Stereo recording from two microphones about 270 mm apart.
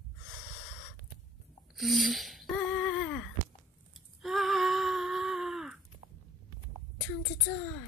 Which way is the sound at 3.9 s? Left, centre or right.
Centre.